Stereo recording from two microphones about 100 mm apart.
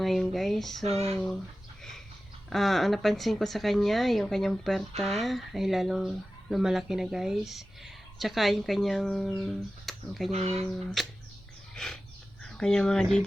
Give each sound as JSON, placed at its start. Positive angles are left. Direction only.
{"t": 0.0, "sound": "a woman's voice", "side_deg": 0}
{"t": 0.9, "sound": "speech", "side_deg": -90}
{"t": 2.5, "sound": "a woman's voice", "side_deg": 0}
{"t": 10.3, "sound": "speech", "side_deg": -90}
{"t": 11.0, "sound": "a woman's voice", "side_deg": 5}
{"t": 11.7, "sound": "a sound", "side_deg": 5}
{"t": 12.4, "sound": "speech", "side_deg": 10}